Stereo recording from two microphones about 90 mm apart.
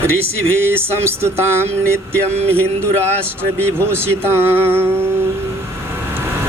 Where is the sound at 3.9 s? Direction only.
25° right (ahead or behind).